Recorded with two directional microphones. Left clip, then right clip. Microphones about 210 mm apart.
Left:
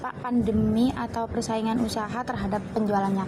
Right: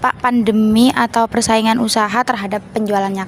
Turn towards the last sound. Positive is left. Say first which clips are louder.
# right 8 dB
turn(degrees=-55)  # may be behind; listen again after turning